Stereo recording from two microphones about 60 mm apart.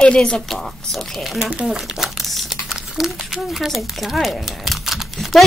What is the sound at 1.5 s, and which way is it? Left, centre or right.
A woman's voice, centre.